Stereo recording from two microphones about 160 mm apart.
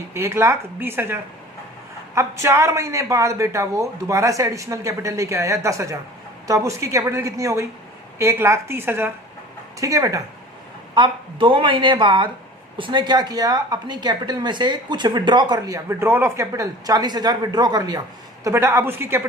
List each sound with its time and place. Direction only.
0.1 s a woman's voice: 15° right (ahead or behind)
10.9 s a woman's voice: 30° right (ahead or behind); by 19.2 s 15° right (ahead or behind)